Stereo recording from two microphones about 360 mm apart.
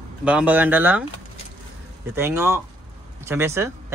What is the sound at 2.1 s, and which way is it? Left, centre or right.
Speech, centre.